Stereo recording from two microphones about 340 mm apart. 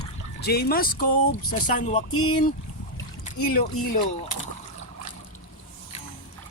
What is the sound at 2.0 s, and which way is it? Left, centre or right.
Speech, left.